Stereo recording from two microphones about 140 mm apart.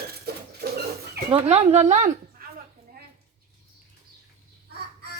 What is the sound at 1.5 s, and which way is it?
Speech, 50° right (ahead or behind).